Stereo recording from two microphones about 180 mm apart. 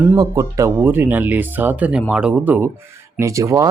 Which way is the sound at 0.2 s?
15° right (ahead or behind).